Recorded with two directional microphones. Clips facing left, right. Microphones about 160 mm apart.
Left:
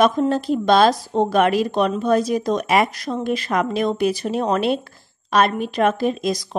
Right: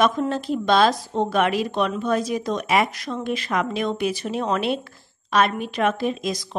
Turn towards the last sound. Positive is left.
turn(degrees=40)  # may be behind; listen again after turning